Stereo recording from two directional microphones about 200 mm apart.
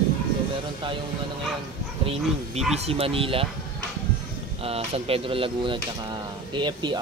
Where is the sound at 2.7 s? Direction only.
30° right (ahead or behind).